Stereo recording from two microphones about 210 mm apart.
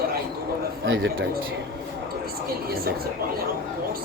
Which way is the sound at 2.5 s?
45° right (ahead or behind).